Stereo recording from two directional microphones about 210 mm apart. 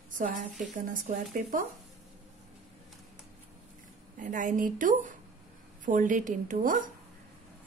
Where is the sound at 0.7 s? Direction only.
40° right (ahead or behind).